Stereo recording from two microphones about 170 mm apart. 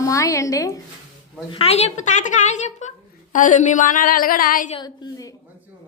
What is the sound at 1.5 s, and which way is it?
Speech, 35° left (ahead or behind).